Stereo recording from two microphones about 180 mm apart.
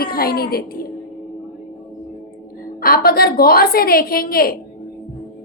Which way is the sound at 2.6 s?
55° left (ahead or behind).